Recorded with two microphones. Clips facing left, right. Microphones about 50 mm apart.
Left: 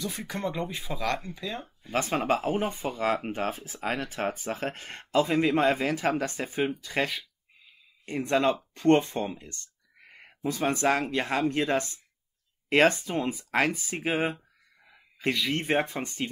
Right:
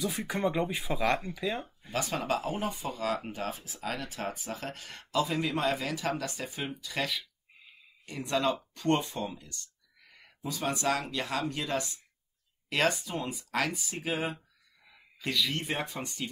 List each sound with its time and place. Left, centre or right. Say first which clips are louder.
0.2 s speech: right 3 dB; centre
1.9 s speech: left 5 dB; left